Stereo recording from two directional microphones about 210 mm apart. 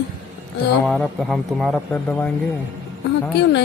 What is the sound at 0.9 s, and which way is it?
Speech, centre (ahead or behind).